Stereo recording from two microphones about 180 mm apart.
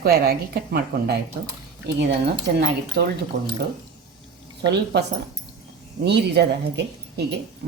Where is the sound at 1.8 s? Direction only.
70° right (ahead or behind).